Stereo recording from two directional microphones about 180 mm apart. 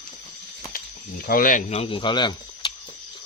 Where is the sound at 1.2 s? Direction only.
50° left (ahead or behind); by 2.7 s 25° left (ahead or behind).